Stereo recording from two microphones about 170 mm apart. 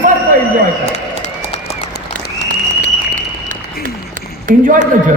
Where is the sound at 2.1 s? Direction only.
55° right (ahead or behind).